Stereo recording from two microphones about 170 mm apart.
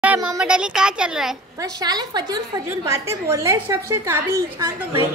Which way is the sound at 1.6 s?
25° right (ahead or behind).